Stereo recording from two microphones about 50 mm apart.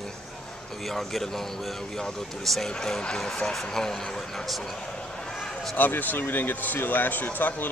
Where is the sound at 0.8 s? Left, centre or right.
Centre.